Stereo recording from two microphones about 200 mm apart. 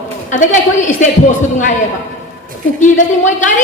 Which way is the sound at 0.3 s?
40° left (ahead or behind).